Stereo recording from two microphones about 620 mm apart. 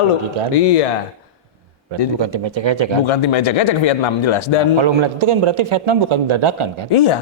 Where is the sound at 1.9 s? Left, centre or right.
Right.